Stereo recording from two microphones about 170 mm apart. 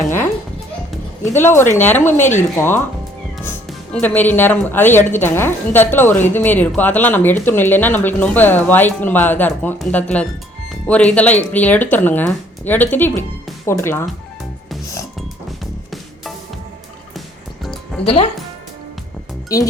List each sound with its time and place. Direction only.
1.4 s speech: 15° left (ahead or behind)
17.2 s music: centre (ahead or behind)
18.0 s speech: 35° left (ahead or behind)
19.5 s speech: 20° left (ahead or behind)